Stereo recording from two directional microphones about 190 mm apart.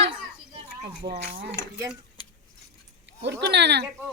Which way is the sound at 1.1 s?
50° right (ahead or behind).